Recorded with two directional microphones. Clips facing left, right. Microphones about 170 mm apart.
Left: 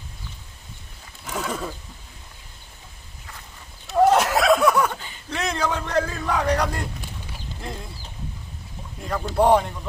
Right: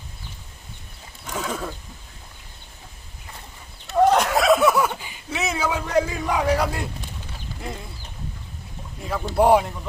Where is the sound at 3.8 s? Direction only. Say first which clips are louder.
Even; 5° left (ahead or behind).